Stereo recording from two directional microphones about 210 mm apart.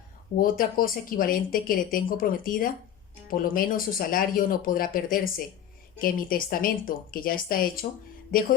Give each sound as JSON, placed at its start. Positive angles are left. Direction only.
{"t": 0.3, "sound": "speech", "side_deg": 40}